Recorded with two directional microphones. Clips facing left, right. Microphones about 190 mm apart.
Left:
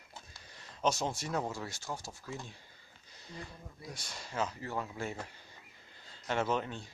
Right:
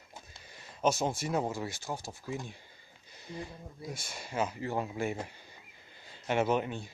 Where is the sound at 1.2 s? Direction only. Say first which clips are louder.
Right 4 dB; 15° right (ahead or behind).